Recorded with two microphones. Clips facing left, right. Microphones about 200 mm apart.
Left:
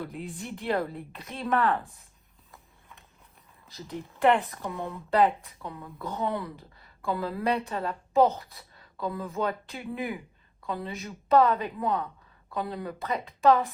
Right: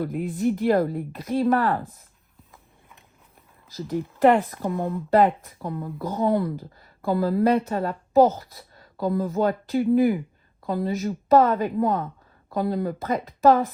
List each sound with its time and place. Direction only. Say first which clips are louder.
0.0 s speech: right 12 dB; 50° right (ahead or behind); by 1.8 s 35° right (ahead or behind)
4.2 s a woman's voice: right 5 dB; 45° right (ahead or behind)